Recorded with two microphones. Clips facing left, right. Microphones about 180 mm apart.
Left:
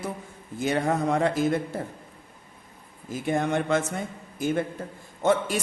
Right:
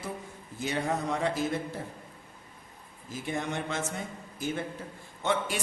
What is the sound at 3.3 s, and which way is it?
Speech, 55° left (ahead or behind).